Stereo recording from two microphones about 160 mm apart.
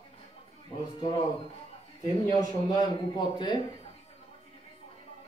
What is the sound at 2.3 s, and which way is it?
A man's voice, 25° left (ahead or behind).